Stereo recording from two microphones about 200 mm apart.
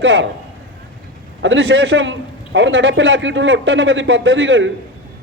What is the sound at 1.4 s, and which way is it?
A man's voice, 70° right (ahead or behind).